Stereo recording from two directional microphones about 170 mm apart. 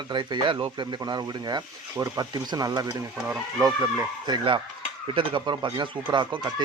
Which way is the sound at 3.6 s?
20° right (ahead or behind).